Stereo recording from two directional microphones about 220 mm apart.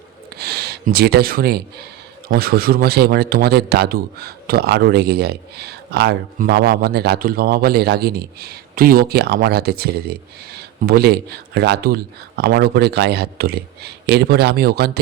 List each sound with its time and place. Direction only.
0.3 s speech: 45° right (ahead or behind)